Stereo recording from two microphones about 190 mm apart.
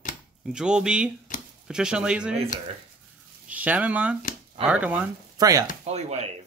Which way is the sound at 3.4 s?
10° right (ahead or behind).